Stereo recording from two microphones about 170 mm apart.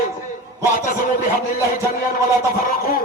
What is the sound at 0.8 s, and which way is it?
Speech, 55° left (ahead or behind).